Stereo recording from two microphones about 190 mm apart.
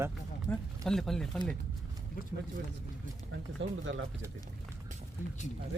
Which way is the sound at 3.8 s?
75° right (ahead or behind).